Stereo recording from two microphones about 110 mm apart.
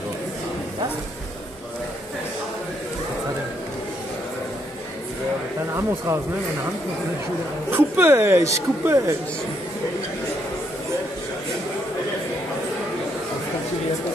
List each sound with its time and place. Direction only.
5.7 s speech: 25° right (ahead or behind)
7.7 s speech: 20° right (ahead or behind)